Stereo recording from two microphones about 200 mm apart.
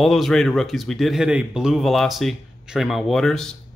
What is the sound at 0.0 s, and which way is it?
Speech, centre (ahead or behind).